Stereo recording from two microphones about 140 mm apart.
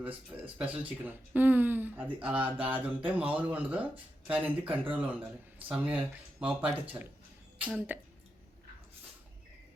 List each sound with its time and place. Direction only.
0.0 s speech: 10° right (ahead or behind)